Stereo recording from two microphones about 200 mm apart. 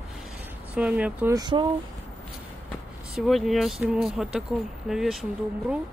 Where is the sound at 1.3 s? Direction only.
20° right (ahead or behind).